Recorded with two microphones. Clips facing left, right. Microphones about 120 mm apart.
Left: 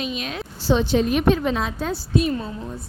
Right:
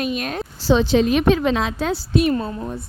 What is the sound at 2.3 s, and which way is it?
Speech, 55° right (ahead or behind).